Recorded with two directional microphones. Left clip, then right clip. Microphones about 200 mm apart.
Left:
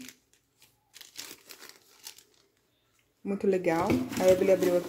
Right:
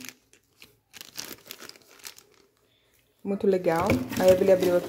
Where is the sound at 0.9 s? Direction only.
20° right (ahead or behind).